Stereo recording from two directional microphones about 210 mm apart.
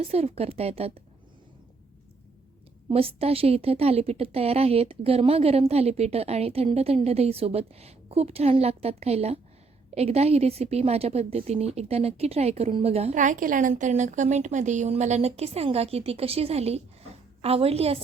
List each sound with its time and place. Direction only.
0.0 s a woman's voice: 30° right (ahead or behind)
2.9 s a woman's voice: 30° right (ahead or behind)